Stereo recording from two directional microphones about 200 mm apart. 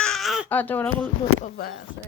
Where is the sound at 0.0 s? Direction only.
Centre (ahead or behind).